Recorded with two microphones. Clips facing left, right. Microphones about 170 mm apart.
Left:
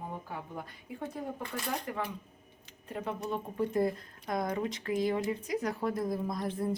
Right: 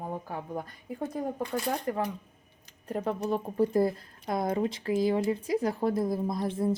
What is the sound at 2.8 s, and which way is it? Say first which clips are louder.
Speech: right 6 dB; 40° right (ahead or behind).